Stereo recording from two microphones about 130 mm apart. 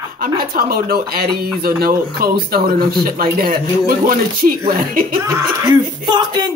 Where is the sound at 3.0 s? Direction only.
90° right.